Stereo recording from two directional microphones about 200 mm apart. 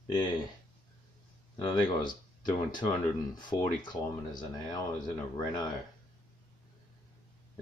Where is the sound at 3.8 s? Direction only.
20° left (ahead or behind).